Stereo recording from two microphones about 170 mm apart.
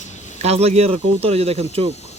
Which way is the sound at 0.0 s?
45° left (ahead or behind).